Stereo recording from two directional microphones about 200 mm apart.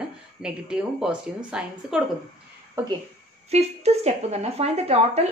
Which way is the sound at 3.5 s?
30° right (ahead or behind).